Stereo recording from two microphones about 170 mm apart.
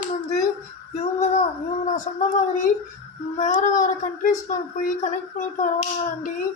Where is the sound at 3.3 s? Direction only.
45° left (ahead or behind).